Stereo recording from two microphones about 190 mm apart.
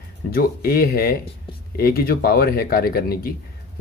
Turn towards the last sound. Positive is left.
turn(degrees=55)  # may be behind; listen again after turning